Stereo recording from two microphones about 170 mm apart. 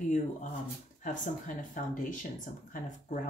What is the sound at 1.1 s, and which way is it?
Speech, 50° left (ahead or behind).